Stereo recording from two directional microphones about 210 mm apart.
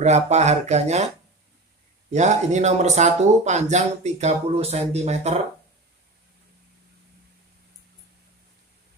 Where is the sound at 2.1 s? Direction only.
35° right (ahead or behind).